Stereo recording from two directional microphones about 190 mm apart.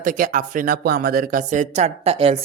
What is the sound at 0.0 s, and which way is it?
Speech, 45° right (ahead or behind).